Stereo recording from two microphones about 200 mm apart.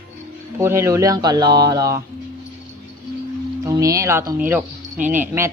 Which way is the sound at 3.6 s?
15° right (ahead or behind).